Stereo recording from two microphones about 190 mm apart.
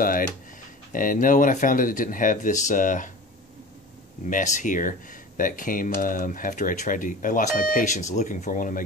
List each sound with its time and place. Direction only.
0.0 s speech: 45° left (ahead or behind)
4.3 s speech: 40° left (ahead or behind)